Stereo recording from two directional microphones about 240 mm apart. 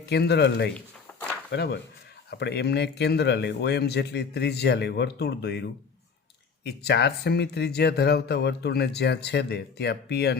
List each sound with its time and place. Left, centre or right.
0.0 s speech: left
6.7 s speech: left